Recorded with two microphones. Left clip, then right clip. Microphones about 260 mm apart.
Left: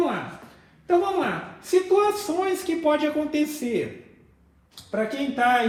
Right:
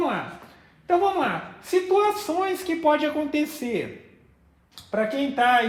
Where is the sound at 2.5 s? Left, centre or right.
Right.